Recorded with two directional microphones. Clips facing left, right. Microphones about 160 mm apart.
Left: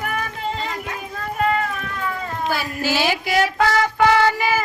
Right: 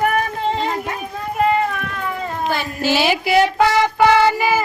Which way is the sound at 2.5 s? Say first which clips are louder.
Right 2 dB; 5° left (ahead or behind).